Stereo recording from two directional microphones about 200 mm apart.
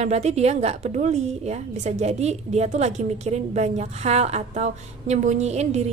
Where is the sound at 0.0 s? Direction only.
35° right (ahead or behind).